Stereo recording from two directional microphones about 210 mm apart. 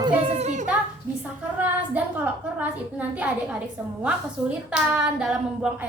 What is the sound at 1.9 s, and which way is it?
Speech, 5° right (ahead or behind).